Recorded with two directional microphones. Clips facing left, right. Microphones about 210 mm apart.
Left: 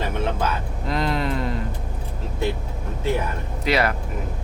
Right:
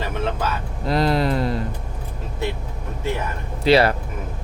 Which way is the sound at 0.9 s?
35° right (ahead or behind).